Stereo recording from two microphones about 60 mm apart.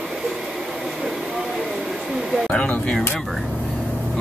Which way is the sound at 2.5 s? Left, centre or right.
Centre.